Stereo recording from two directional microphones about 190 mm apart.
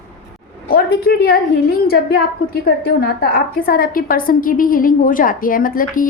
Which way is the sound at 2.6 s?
55° left (ahead or behind).